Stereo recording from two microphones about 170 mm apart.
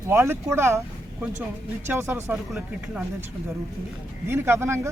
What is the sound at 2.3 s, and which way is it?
Speech, 5° right (ahead or behind).